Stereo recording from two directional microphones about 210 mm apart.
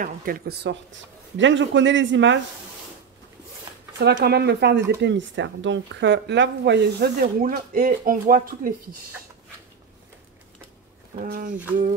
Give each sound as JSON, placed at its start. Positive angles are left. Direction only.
{"t": 0.0, "sound": "speech", "side_deg": -45}
{"t": 1.3, "sound": "a man's voice", "side_deg": -60}
{"t": 4.0, "sound": "speech", "side_deg": -50}
{"t": 11.1, "sound": "speech", "side_deg": -40}